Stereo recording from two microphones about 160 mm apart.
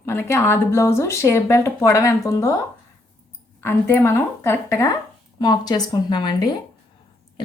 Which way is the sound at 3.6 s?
15° left (ahead or behind).